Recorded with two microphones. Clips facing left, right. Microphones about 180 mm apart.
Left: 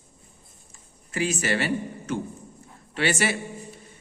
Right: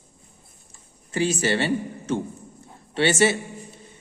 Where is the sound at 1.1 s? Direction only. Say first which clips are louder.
Right 3 dB; 30° right (ahead or behind).